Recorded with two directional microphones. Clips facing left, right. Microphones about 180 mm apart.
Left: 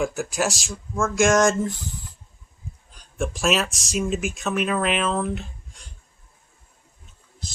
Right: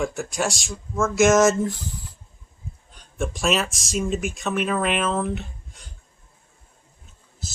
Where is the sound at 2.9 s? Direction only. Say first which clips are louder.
Left 1 dB; centre (ahead or behind).